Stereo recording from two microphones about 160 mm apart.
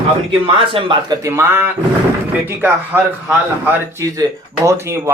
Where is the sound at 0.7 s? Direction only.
30° right (ahead or behind).